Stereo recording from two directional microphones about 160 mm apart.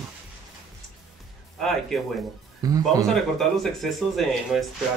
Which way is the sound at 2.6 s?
20° right (ahead or behind).